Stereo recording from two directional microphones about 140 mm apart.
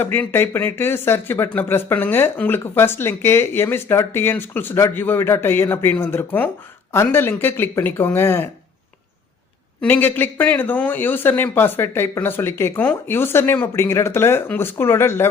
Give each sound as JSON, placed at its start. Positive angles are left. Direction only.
{"t": 0.0, "sound": "speech", "side_deg": 15}
{"t": 9.8, "sound": "speech", "side_deg": 15}